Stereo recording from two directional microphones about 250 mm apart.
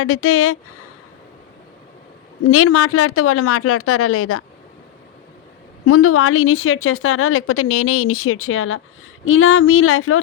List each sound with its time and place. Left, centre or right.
0.0 s a woman's voice: left
2.5 s a woman's voice: left
5.8 s a woman's voice: left